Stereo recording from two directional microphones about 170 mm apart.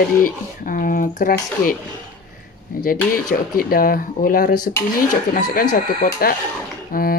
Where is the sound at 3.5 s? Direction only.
60° left (ahead or behind).